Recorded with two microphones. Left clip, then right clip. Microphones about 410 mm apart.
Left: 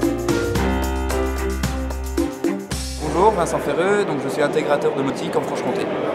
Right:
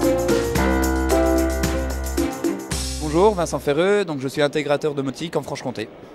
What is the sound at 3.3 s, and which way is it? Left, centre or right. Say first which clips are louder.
Speech: left 1 dB; right.